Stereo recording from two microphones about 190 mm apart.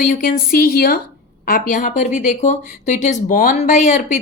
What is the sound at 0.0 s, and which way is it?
Speech, 45° left (ahead or behind).